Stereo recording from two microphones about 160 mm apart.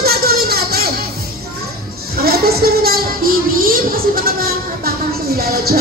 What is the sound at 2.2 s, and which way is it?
Music, 75° right (ahead or behind).